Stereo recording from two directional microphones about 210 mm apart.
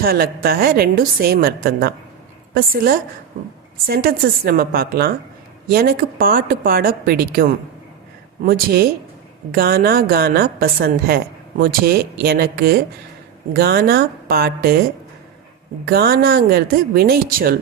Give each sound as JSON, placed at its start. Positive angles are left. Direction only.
{"t": 0.0, "sound": "a woman's voice", "side_deg": -45}
{"t": 15.9, "sound": "a woman's voice", "side_deg": -45}